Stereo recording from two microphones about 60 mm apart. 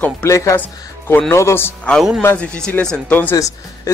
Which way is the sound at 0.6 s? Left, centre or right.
Left.